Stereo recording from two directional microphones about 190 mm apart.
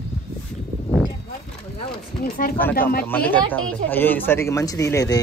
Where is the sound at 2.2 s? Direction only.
50° left (ahead or behind).